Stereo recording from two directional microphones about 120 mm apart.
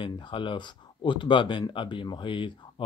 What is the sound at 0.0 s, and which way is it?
Speech, 45° left (ahead or behind).